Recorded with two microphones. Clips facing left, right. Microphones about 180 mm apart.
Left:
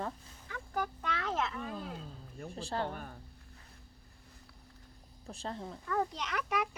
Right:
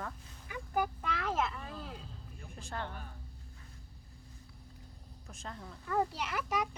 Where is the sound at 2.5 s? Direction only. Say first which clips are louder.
Left 6 dB; 35° left (ahead or behind).